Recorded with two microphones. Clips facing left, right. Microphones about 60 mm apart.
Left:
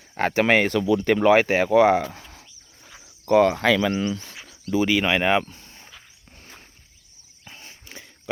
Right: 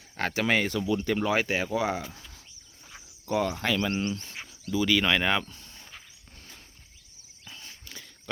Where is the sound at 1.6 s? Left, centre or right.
Left.